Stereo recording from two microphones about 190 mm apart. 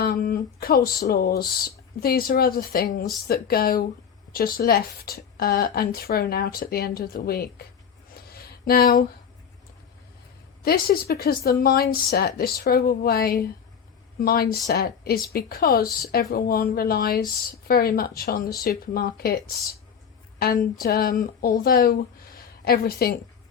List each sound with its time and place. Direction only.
0.0 s speech: 55° left (ahead or behind)
8.3 s a sound: 55° left (ahead or behind)
10.6 s speech: 50° left (ahead or behind)
20.4 s speech: 50° left (ahead or behind)